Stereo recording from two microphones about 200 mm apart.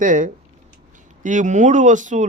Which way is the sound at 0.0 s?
40° right (ahead or behind).